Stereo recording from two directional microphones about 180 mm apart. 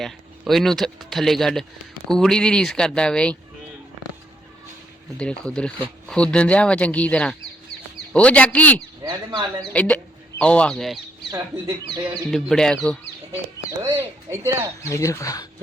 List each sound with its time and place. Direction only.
0.0 s speech: centre (ahead or behind)
5.1 s speech: 5° left (ahead or behind)
9.0 s speech: 25° right (ahead or behind)
9.7 s speech: 5° left (ahead or behind)
11.3 s speech: 15° right (ahead or behind)
12.3 s speech: 5° left (ahead or behind)
13.7 s speech: 15° right (ahead or behind)
14.8 s speech: 15° left (ahead or behind)